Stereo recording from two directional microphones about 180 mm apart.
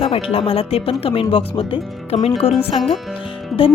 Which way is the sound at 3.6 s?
30° left (ahead or behind).